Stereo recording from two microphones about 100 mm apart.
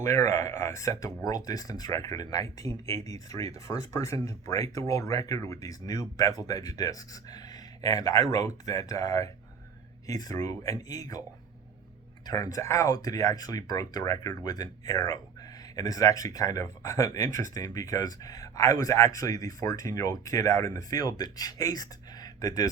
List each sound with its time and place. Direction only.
0.0 s speech: 30° left (ahead or behind)
12.2 s speech: 35° left (ahead or behind)